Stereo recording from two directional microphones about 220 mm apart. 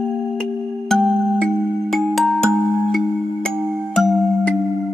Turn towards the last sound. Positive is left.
turn(degrees=5)  # may be behind; listen again after turning